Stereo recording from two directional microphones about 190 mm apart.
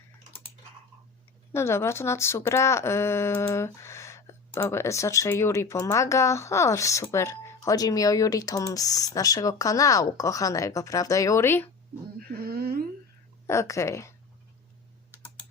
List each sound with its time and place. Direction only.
1.5 s speech: 15° left (ahead or behind)
12.3 s a sound: 55° right (ahead or behind)
13.5 s speech: 15° left (ahead or behind)